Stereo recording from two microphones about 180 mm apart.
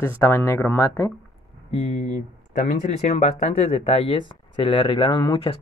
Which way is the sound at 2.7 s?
40° left (ahead or behind).